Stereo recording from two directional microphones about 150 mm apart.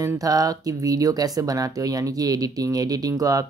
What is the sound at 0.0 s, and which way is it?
Speech, 25° right (ahead or behind).